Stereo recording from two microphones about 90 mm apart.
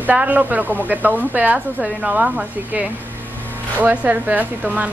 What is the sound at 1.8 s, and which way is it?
A woman's voice, 5° right (ahead or behind).